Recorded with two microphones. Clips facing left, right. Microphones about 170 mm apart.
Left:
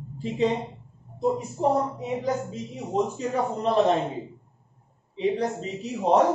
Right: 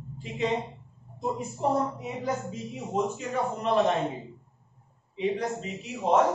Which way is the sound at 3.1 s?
35° left (ahead or behind).